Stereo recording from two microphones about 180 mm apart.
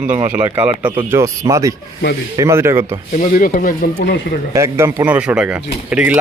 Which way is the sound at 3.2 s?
50° left (ahead or behind).